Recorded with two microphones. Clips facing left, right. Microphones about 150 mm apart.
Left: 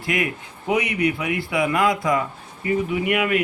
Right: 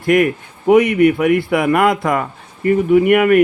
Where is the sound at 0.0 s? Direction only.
50° right (ahead or behind).